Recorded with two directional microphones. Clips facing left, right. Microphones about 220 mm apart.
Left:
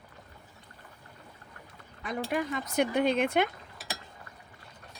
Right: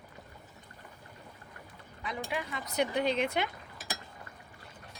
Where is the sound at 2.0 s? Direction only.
45° left (ahead or behind).